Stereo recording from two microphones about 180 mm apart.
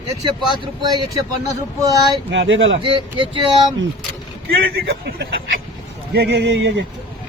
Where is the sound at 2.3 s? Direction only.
90° right.